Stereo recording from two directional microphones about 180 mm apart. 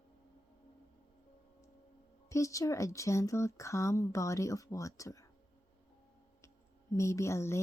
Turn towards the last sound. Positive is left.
turn(degrees=15)  # may be behind; listen again after turning